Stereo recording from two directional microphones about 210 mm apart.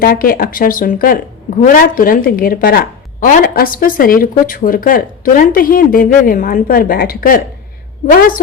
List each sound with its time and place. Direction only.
0.0 s a woman's voice: 45° left (ahead or behind)